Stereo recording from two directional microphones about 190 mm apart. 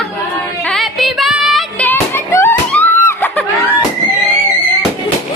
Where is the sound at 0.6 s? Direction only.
5° left (ahead or behind).